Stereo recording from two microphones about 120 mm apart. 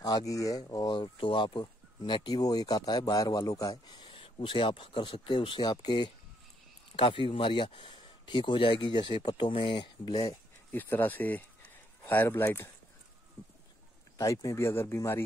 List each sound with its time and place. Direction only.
0.3 s speech: 30° left (ahead or behind)
7.0 s speech: 50° left (ahead or behind); by 10.4 s 30° left (ahead or behind)
10.7 s speech: 15° left (ahead or behind)
14.1 s speech: 25° left (ahead or behind)